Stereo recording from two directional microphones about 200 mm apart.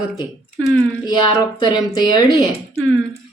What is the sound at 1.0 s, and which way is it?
A woman's voice, 20° left (ahead or behind).